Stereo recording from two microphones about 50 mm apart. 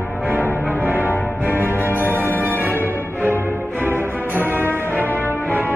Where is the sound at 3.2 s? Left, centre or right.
Right.